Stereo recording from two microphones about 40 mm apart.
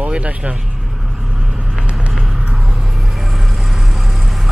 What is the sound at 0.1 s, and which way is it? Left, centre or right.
Speech, right.